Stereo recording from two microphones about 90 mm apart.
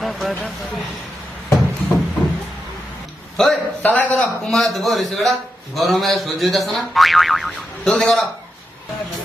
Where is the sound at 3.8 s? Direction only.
20° left (ahead or behind).